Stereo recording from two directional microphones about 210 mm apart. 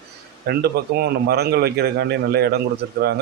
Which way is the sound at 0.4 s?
50° right (ahead or behind).